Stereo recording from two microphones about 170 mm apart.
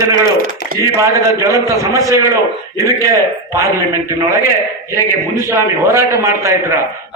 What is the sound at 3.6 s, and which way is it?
Speech, 15° right (ahead or behind).